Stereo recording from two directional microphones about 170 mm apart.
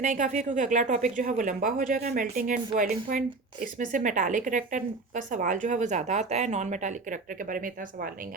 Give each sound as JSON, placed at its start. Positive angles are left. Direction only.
{"t": 0.0, "sound": "speech", "side_deg": -50}